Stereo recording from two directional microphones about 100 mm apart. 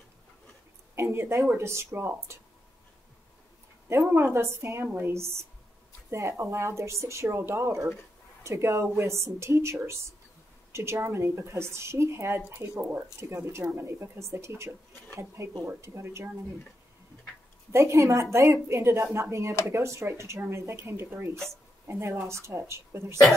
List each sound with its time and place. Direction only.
0.9 s speech: 25° right (ahead or behind)
3.9 s speech: 25° right (ahead or behind)
13.2 s speech: 25° right (ahead or behind)
17.7 s speech: 30° right (ahead or behind)